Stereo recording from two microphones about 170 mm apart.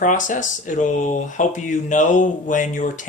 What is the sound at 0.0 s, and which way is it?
Speech, 50° left (ahead or behind).